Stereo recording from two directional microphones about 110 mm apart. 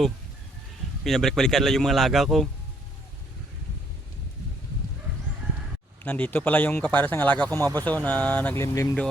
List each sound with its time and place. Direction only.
1.0 s speech: 5° left (ahead or behind)
6.0 s speech: 15° left (ahead or behind)
8.5 s speech: 25° left (ahead or behind)